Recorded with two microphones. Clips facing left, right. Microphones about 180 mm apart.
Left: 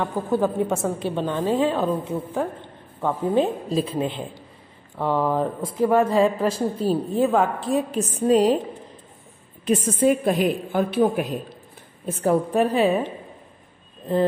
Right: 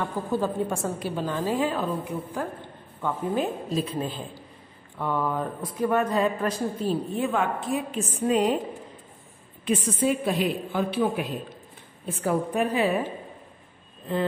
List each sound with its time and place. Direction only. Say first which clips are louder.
0.3 s a woman's voice: left 5 dB; 20° left (ahead or behind)
6.9 s a woman's voice: left 7 dB; 40° left (ahead or behind)
9.7 s a woman's voice: left 5 dB; 45° left (ahead or behind)